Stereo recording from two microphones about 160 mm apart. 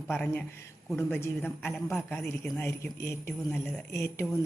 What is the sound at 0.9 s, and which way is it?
Speech, 10° left (ahead or behind).